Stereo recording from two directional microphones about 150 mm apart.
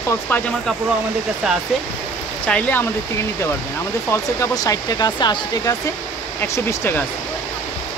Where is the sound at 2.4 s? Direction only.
10° left (ahead or behind).